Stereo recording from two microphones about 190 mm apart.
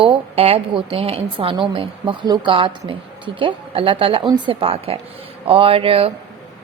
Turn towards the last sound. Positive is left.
turn(degrees=-30)  # may be behind; listen again after turning